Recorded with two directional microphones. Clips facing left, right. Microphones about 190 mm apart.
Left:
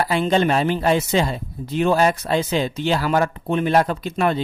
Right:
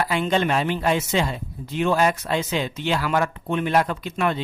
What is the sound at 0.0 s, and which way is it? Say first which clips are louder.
Speech: left 3 dB; 35° left (ahead or behind).